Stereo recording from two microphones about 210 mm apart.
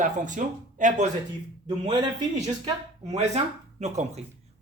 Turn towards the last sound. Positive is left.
turn(degrees=-30)  # may be behind; listen again after turning